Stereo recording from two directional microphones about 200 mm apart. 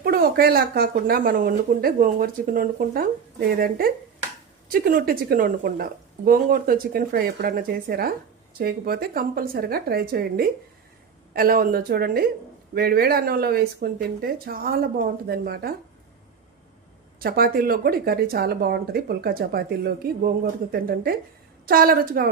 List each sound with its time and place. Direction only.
0.0 s a woman's voice: 50° right (ahead or behind)
4.7 s a woman's voice: 45° right (ahead or behind)
17.2 s a woman's voice: 50° right (ahead or behind)